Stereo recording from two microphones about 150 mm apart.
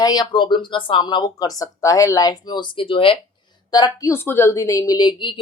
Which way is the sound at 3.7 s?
25° left (ahead or behind).